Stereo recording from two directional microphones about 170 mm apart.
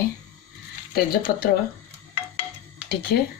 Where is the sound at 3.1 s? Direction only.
75° left (ahead or behind).